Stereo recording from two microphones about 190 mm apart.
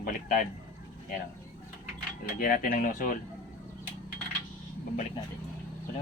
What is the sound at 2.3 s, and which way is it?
Speech, 50° left (ahead or behind).